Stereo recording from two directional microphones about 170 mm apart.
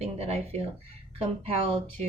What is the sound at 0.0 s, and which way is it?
Speech, 40° right (ahead or behind).